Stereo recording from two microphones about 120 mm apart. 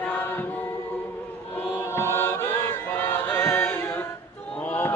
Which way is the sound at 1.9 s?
20° left (ahead or behind).